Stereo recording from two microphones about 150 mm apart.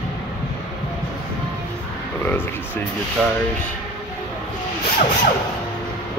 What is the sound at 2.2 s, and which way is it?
Speech, 15° left (ahead or behind).